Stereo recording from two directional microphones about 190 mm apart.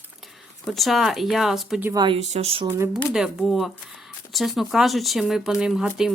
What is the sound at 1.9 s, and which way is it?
Speech, 25° right (ahead or behind).